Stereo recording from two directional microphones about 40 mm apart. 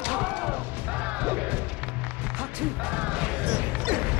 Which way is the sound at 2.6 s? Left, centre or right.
Right.